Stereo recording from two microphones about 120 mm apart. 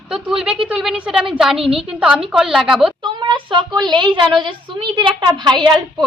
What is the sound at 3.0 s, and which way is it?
A woman's voice, 40° right (ahead or behind).